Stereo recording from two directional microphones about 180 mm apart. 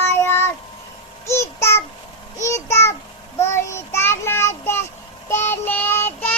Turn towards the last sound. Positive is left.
turn(degrees=10)  # may be behind; listen again after turning